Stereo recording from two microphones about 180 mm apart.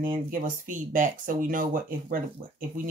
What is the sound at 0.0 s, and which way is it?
Speech, 50° right (ahead or behind).